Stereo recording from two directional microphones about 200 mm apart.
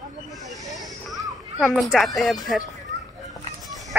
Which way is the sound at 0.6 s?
Centre (ahead or behind).